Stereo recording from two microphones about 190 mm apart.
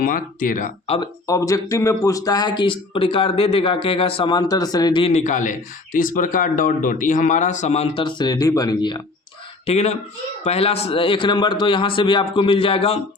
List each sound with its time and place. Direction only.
0.0 s speech: 45° left (ahead or behind)
1.3 s speech: 15° left (ahead or behind)
9.6 s speech: 35° left (ahead or behind)